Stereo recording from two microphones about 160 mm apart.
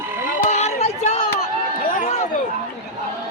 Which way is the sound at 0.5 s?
45° left (ahead or behind).